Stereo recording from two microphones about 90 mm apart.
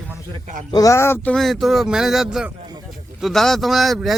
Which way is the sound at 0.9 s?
30° left (ahead or behind).